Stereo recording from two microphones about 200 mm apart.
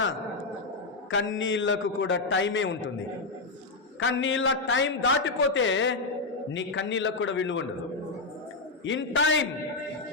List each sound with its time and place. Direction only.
1.1 s a man's voice: 70° left (ahead or behind)
4.0 s a man's voice: 75° left (ahead or behind)
8.8 s a man's voice: 70° left (ahead or behind)